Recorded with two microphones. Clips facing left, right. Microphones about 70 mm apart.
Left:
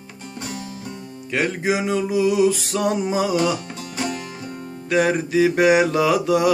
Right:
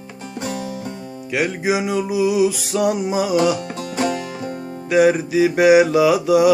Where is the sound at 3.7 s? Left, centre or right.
Right.